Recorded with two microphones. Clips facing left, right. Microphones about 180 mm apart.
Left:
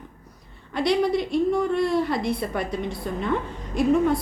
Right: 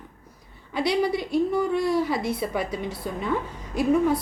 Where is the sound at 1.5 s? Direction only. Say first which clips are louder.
Left 1 dB; 5° right (ahead or behind).